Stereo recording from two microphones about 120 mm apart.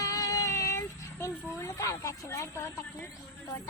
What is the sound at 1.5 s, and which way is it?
Speech, 25° left (ahead or behind).